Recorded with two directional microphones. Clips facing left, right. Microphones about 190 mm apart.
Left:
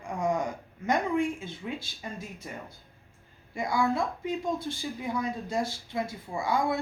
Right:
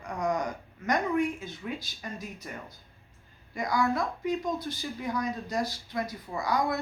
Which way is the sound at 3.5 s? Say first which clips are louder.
Even; 25° left (ahead or behind).